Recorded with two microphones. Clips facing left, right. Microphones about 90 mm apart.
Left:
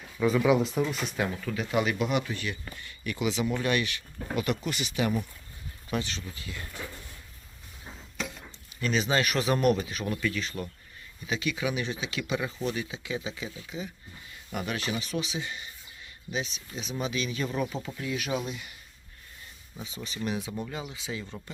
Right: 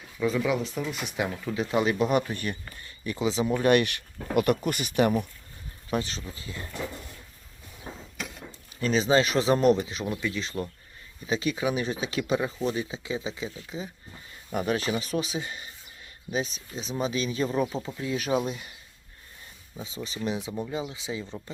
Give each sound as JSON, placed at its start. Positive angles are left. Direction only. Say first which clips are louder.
{"t": 0.2, "sound": "speech", "louder": "left 3 dB", "side_deg": 0}
{"t": 1.0, "sound": "speech", "louder": "right 1 dB", "side_deg": -15}
{"t": 2.8, "sound": "speech", "louder": "right 2 dB", "side_deg": -30}
{"t": 3.6, "sound": "speech", "louder": "right 7 dB", "side_deg": -55}
{"t": 5.9, "sound": "speech", "louder": "right 3 dB", "side_deg": -35}
{"t": 8.8, "sound": "speech", "louder": "right 4 dB", "side_deg": -35}
{"t": 20.1, "sound": "speech", "louder": "right 1 dB", "side_deg": -25}